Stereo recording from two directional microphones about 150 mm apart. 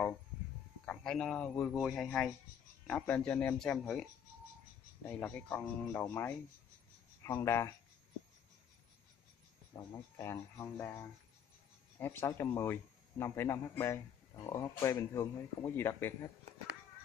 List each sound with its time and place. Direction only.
0.8 s speech: 5° left (ahead or behind)
5.0 s speech: 10° left (ahead or behind)
9.9 s speech: 20° left (ahead or behind)